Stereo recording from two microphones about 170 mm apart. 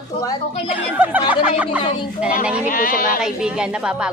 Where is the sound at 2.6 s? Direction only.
55° left (ahead or behind).